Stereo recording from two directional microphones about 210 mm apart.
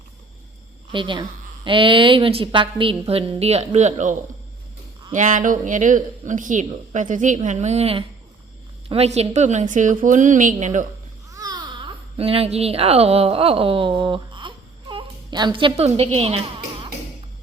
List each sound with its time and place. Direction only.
0.9 s a woman's voice: 25° right (ahead or behind)
11.3 s babbling: 15° right (ahead or behind)
12.1 s a woman's voice: 30° right (ahead or behind)